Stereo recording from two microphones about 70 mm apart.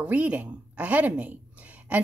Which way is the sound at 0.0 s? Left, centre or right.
Centre.